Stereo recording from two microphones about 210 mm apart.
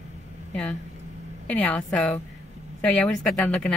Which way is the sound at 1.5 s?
5° left (ahead or behind).